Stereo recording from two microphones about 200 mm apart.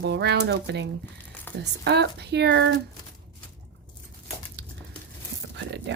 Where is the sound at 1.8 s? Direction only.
55° right (ahead or behind).